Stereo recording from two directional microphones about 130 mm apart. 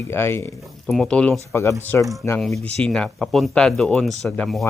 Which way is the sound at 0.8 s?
Centre (ahead or behind).